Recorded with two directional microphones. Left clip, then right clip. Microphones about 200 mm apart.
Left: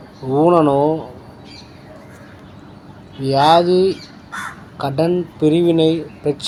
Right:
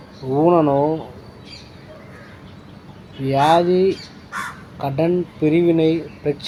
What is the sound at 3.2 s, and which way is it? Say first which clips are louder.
Speech: left 3 dB; 25° left (ahead or behind).